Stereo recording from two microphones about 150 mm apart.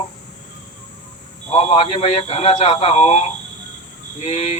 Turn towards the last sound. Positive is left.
turn(degrees=45)  # may be behind; listen again after turning